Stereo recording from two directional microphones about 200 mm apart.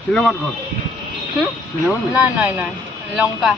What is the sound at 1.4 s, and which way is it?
Speech, 5° right (ahead or behind).